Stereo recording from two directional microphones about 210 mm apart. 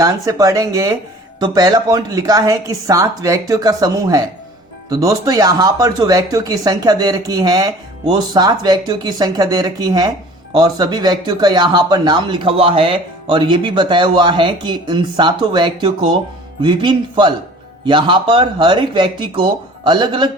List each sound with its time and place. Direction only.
0.0 s speech: 15° right (ahead or behind)